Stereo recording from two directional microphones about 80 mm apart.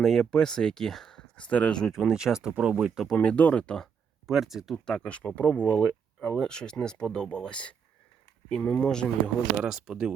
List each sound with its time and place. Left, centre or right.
0.0 s speech: centre
1.5 s speech: centre
1.9 s speech: centre
3.1 s speech: centre
4.3 s speech: centre
4.9 s speech: centre
9.6 s speech: centre